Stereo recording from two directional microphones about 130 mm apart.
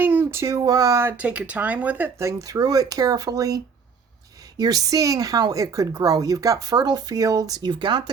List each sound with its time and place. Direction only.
0.0 s speech: 15° right (ahead or behind); by 8.1 s 35° right (ahead or behind)